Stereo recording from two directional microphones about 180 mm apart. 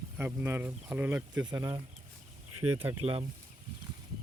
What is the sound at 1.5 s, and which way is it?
Speech, 20° right (ahead or behind).